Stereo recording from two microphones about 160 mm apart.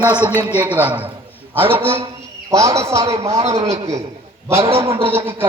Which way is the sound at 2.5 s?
20° right (ahead or behind).